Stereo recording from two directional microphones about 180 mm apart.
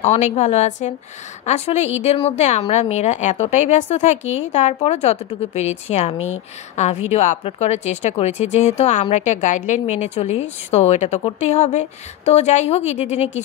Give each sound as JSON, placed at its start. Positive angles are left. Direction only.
{"t": 0.0, "sound": "a woman's voice", "side_deg": 40}